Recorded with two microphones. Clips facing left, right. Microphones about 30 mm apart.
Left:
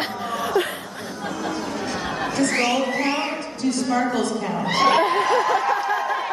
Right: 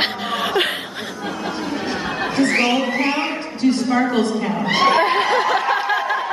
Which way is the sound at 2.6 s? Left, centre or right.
Right.